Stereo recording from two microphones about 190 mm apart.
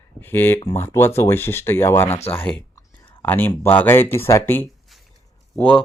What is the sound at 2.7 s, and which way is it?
Clicking, 10° left (ahead or behind).